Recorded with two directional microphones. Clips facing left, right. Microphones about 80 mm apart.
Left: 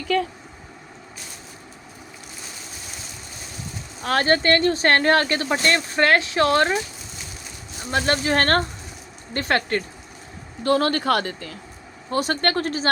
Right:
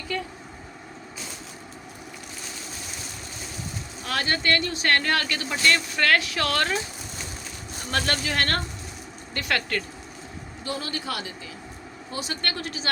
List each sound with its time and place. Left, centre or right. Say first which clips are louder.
4.0 s speech: left 7 dB; left
7.9 s speech: left 5 dB; left
8.3 s speech: left 7 dB; left
10.6 s speech: left 12 dB; left